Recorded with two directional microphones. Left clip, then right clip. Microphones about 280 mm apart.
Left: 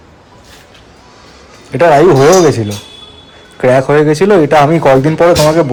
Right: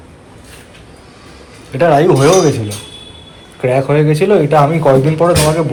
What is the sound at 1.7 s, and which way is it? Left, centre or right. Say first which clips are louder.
Speech: left 4 dB; left.